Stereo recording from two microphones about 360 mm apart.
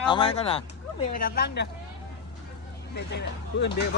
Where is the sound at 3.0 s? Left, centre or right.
Left.